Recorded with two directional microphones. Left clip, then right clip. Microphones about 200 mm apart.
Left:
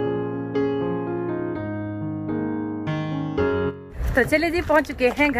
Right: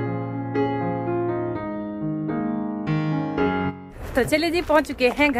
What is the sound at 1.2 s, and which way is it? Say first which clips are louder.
Music: right 2 dB; centre (ahead or behind).